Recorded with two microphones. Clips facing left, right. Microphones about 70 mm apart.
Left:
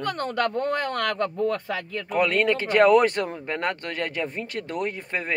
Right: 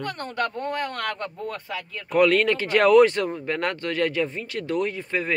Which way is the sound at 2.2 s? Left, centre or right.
Left.